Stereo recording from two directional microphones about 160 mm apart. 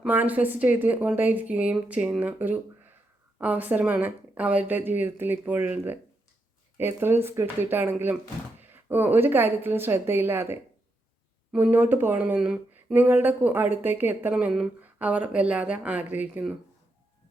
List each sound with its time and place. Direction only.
0.0 s speech: 10° right (ahead or behind)